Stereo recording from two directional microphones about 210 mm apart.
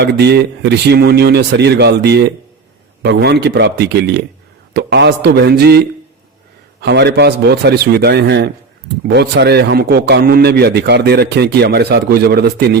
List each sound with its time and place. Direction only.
0.0 s a man's voice: 55° right (ahead or behind)
6.8 s a man's voice: 55° right (ahead or behind)